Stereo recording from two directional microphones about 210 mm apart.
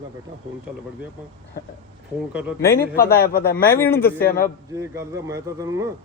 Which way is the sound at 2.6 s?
15° left (ahead or behind).